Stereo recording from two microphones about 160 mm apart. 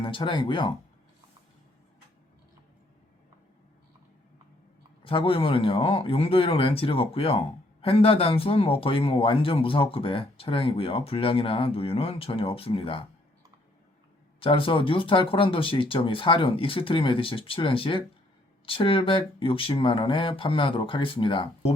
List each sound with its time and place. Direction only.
0.0 s speech: 30° left (ahead or behind)
5.0 s speech: 35° left (ahead or behind)
14.4 s speech: 35° left (ahead or behind)